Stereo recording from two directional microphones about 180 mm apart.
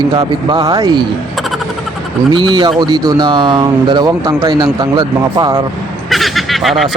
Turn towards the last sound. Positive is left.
turn(degrees=0)  # may be behind; listen again after turning